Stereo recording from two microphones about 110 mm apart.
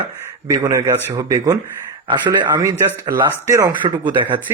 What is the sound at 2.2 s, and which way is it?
Speech, 35° right (ahead or behind).